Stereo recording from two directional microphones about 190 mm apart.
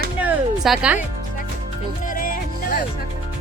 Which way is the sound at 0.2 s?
5° right (ahead or behind).